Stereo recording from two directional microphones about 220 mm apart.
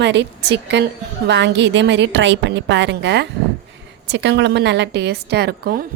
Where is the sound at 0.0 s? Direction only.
50° right (ahead or behind).